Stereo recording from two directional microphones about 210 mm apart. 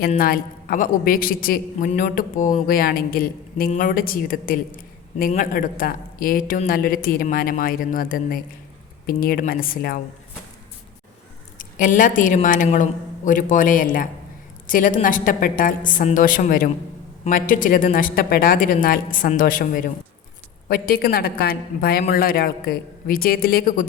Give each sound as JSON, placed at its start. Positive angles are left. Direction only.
{"t": 0.2, "sound": "a man's voice", "side_deg": 45}
{"t": 11.5, "sound": "a woman's voice", "side_deg": 40}